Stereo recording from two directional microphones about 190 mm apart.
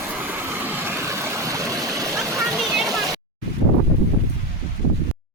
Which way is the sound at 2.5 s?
Centre (ahead or behind).